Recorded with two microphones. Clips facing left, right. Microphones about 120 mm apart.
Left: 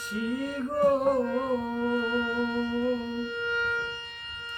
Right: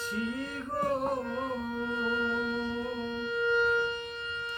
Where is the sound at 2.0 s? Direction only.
15° right (ahead or behind).